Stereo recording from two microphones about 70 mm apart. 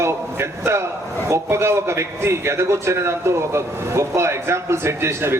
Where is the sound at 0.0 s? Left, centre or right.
Right.